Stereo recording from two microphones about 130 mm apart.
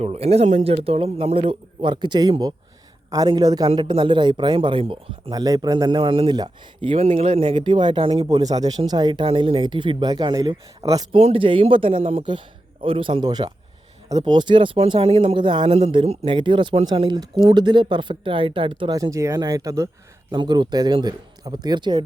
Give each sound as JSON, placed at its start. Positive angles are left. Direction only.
{"t": 0.0, "sound": "a man's voice", "side_deg": -55}
{"t": 5.3, "sound": "speech", "side_deg": -30}
{"t": 6.9, "sound": "a man's voice", "side_deg": -50}
{"t": 8.3, "sound": "speech", "side_deg": -30}
{"t": 9.2, "sound": "speech", "side_deg": -45}
{"t": 11.1, "sound": "a man's voice", "side_deg": -50}
{"t": 19.1, "sound": "speech", "side_deg": -25}
{"t": 20.3, "sound": "speech", "side_deg": -35}